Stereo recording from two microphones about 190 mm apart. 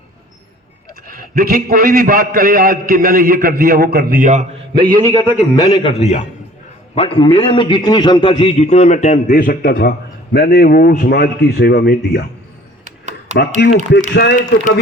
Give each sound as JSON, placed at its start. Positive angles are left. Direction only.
{"t": 1.0, "sound": "a man's voice", "side_deg": -50}
{"t": 4.7, "sound": "a man's voice", "side_deg": -25}
{"t": 5.1, "sound": "a man's voice", "side_deg": 20}
{"t": 9.2, "sound": "a man's voice", "side_deg": 50}
{"t": 12.8, "sound": "a sound", "side_deg": -40}
{"t": 13.6, "sound": "a man's voice", "side_deg": 60}